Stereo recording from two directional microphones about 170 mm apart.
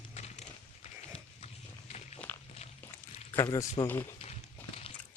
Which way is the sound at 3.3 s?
10° left (ahead or behind).